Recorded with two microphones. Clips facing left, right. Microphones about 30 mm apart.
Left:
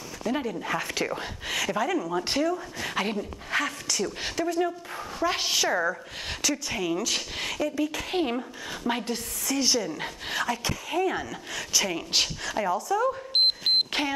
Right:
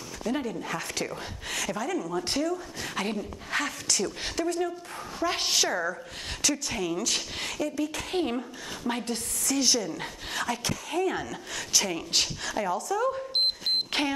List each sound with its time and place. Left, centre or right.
0.3 s speech: centre